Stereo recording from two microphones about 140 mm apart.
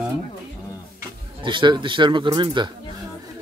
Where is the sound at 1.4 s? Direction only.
35° right (ahead or behind).